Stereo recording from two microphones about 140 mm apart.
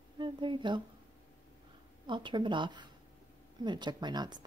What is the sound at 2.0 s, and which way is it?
Speech, 35° right (ahead or behind).